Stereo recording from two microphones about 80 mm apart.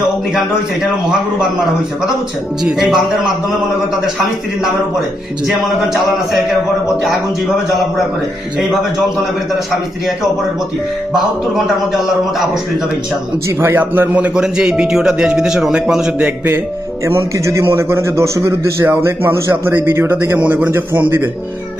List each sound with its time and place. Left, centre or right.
2.6 s a man's voice: centre
6.3 s a man's voice: centre
8.5 s a man's voice: centre
13.6 s a man's voice: right
14.4 s speech: centre; by 16.6 s right
17.0 s a man's voice: right
20.3 s a man's voice: centre